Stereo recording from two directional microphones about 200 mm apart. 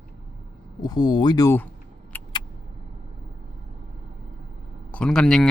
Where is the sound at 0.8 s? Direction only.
20° left (ahead or behind).